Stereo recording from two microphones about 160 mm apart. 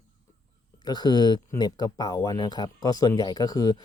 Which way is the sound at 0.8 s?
25° left (ahead or behind).